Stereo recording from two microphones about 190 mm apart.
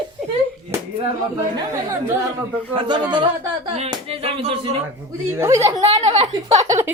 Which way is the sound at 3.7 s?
35° right (ahead or behind).